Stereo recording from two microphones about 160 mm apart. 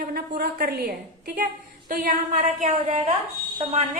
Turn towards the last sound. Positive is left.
turn(degrees=-45)  # may be behind; listen again after turning